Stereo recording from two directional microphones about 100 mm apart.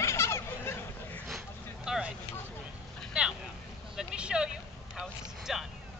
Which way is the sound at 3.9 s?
5° right (ahead or behind).